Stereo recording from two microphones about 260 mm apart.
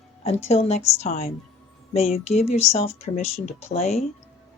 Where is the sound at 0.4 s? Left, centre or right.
Left.